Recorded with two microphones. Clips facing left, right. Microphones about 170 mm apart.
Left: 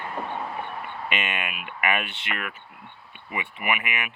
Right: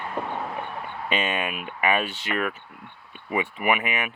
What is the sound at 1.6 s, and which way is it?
Speech, 35° right (ahead or behind).